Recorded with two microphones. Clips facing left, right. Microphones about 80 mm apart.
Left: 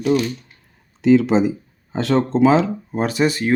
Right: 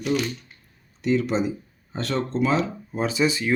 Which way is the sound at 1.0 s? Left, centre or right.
Left.